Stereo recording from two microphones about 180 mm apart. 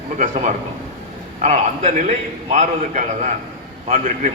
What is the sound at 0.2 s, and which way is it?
A man's voice, 40° right (ahead or behind).